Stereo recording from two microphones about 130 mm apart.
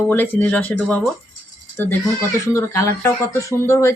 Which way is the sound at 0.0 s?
15° left (ahead or behind).